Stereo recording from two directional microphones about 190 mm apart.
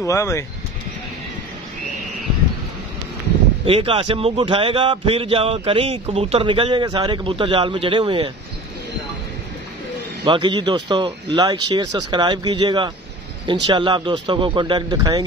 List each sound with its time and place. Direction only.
0.0 s speech: 15° left (ahead or behind)
3.6 s speech: 30° right (ahead or behind)
10.2 s speech: 25° right (ahead or behind)